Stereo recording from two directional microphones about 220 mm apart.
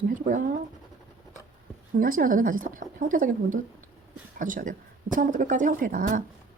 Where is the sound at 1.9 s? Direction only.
40° right (ahead or behind).